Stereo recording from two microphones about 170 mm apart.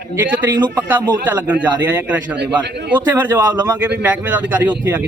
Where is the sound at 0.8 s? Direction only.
10° right (ahead or behind).